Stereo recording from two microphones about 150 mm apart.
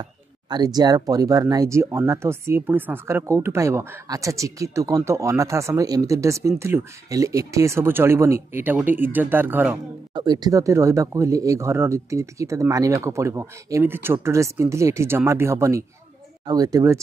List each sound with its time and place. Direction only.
0.0 s speech: 30° right (ahead or behind); by 9.8 s 15° right (ahead or behind)
10.1 s speech: 30° right (ahead or behind)